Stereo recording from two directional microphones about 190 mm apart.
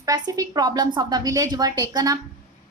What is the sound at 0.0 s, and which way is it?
A woman's voice, 20° right (ahead or behind).